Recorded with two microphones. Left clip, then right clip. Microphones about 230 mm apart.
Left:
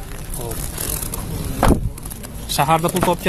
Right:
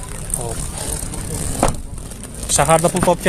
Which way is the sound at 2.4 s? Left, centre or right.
Centre.